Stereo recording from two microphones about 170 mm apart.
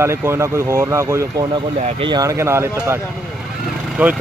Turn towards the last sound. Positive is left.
turn(degrees=-10)  # may be behind; listen again after turning